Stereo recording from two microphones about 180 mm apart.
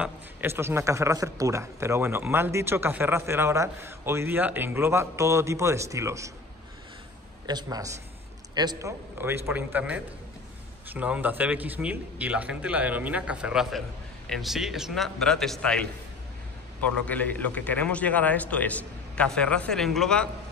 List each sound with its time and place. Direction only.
0.0 s a man's voice: 10° right (ahead or behind)
7.4 s a man's voice: 20° right (ahead or behind); by 20.2 s 5° left (ahead or behind)